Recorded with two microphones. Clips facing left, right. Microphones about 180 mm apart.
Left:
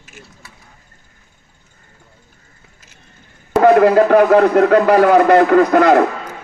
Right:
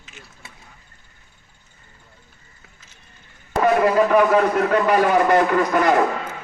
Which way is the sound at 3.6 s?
65° left (ahead or behind).